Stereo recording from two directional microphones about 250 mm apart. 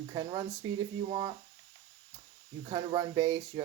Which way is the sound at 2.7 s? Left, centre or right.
Centre.